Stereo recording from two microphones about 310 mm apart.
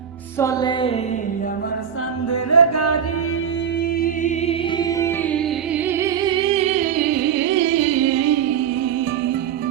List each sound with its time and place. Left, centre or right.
0.3 s music: centre
2.3 s music: left
4.0 s music: left
4.8 s music: centre
6.0 s music: centre; by 8.5 s right